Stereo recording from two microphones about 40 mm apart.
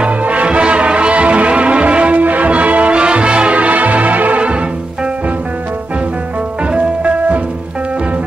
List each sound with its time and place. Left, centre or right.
0.0 s music: right
6.7 s music: right